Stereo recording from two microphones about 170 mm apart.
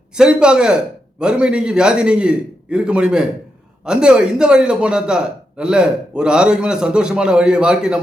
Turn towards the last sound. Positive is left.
turn(degrees=-5)  # may be behind; listen again after turning